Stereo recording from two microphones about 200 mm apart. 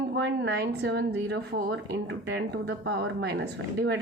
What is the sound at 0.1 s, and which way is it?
A woman's voice, 60° right (ahead or behind).